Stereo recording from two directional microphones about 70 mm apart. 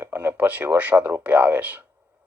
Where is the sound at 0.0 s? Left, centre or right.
Right.